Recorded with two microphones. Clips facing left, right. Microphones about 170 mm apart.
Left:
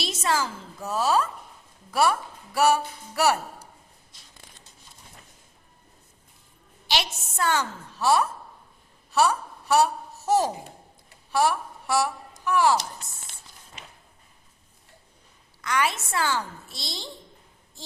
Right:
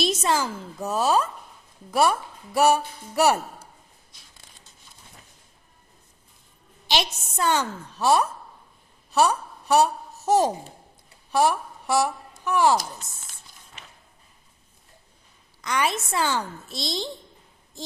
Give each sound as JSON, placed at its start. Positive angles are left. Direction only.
{"t": 0.0, "sound": "a woman's voice", "side_deg": -20}
{"t": 6.8, "sound": "a woman's voice", "side_deg": -20}
{"t": 11.3, "sound": "a sound", "side_deg": -20}
{"t": 12.5, "sound": "a woman's voice", "side_deg": -20}
{"t": 15.6, "sound": "a woman's voice", "side_deg": -20}